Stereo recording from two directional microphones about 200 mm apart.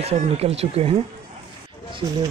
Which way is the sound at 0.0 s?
30° right (ahead or behind).